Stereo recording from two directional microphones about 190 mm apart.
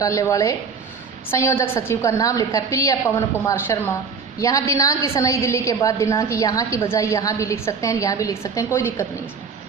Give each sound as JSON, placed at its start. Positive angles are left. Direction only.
{"t": 0.0, "sound": "a woman's voice", "side_deg": 15}